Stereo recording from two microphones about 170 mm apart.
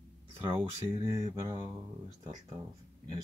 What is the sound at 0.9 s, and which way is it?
Mantra, 20° right (ahead or behind).